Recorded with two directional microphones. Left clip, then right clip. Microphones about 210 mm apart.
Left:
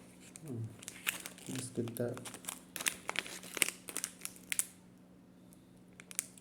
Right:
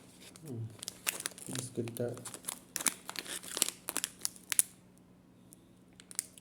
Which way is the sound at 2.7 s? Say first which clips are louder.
Left 1 dB; 5° left (ahead or behind).